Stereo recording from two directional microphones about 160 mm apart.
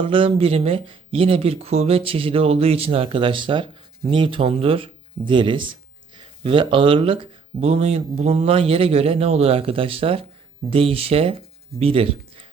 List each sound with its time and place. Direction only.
0.0 s speech: 35° right (ahead or behind)